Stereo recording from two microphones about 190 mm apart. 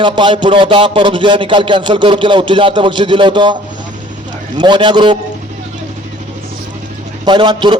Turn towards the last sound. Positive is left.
turn(degrees=-25)  # may be behind; listen again after turning